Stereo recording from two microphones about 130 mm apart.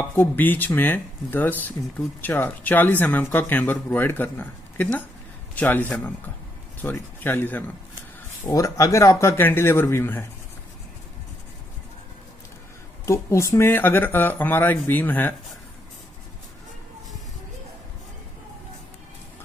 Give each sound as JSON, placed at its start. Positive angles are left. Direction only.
{"t": 0.1, "sound": "speech", "side_deg": 15}
{"t": 13.0, "sound": "speech", "side_deg": 20}